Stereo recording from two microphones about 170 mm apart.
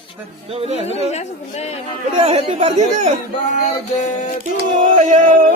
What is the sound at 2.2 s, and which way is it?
Speech, 40° right (ahead or behind).